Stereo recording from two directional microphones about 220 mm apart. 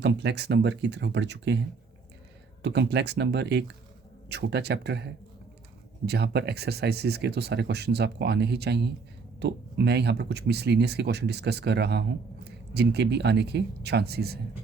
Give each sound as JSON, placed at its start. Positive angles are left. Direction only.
{"t": 0.0, "sound": "speech", "side_deg": -50}
{"t": 2.6, "sound": "speech", "side_deg": -50}
{"t": 6.1, "sound": "speech", "side_deg": -50}